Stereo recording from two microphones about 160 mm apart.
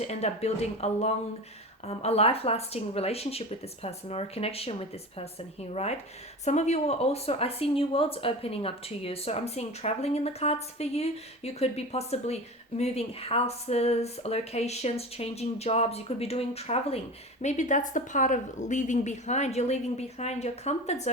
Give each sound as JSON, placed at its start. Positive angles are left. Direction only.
{"t": 0.0, "sound": "a woman's voice", "side_deg": 45}
{"t": 17.4, "sound": "a woman's voice", "side_deg": 50}